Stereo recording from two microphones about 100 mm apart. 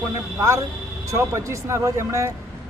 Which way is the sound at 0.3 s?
30° right (ahead or behind).